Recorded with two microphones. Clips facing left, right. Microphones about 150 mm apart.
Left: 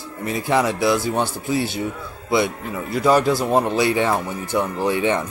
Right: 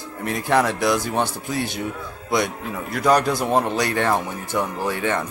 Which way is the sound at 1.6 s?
55° right (ahead or behind).